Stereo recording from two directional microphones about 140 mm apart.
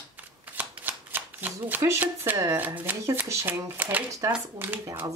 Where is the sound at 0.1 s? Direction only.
10° right (ahead or behind).